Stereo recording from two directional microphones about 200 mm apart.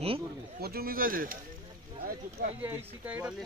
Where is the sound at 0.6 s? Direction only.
50° right (ahead or behind).